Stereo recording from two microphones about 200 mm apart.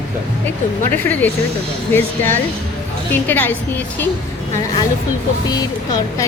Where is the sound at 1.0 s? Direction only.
10° left (ahead or behind).